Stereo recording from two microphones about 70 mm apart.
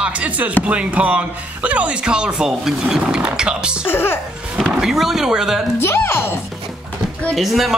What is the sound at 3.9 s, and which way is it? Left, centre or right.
Speech, left.